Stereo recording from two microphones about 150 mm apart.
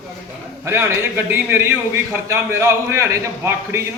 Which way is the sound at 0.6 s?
15° right (ahead or behind).